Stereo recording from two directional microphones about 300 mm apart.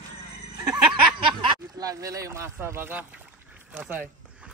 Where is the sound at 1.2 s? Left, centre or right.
Centre.